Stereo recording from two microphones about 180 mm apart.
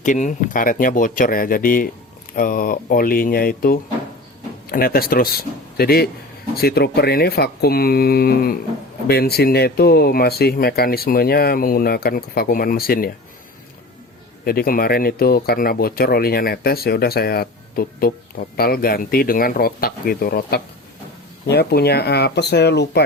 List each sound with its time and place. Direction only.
0.0 s speech: 45° left (ahead or behind)
14.4 s speech: 55° left (ahead or behind)